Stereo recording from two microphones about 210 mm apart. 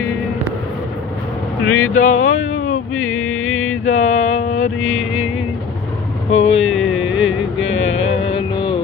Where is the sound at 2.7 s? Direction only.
80° left.